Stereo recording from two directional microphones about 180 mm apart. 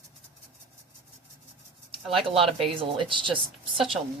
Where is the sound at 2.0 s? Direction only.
Centre (ahead or behind).